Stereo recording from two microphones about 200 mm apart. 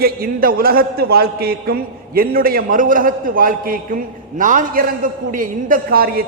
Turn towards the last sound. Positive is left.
turn(degrees=-50)  # may be behind; listen again after turning